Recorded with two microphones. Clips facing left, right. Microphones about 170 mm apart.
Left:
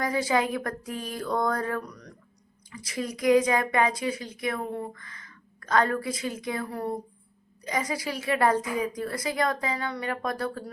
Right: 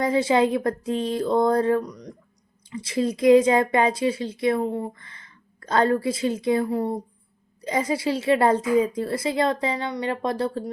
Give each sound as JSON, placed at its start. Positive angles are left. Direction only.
{"t": 0.0, "sound": "speech", "side_deg": -25}